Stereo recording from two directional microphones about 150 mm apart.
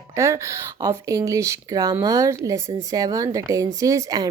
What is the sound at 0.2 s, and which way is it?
Speech, 20° right (ahead or behind).